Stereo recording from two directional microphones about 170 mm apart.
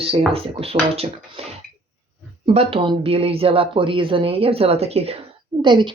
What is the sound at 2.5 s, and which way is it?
Speech, 30° right (ahead or behind).